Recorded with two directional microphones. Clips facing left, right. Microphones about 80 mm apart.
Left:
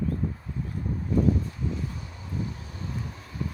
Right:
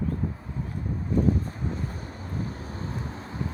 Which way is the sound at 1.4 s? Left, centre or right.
Right.